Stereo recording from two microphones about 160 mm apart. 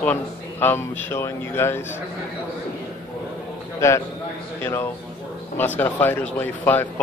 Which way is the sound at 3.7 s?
20° left (ahead or behind).